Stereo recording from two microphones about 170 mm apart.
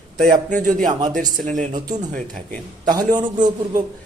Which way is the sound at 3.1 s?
25° right (ahead or behind).